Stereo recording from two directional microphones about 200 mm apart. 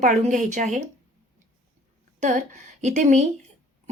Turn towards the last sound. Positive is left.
turn(degrees=-35)  # may be behind; listen again after turning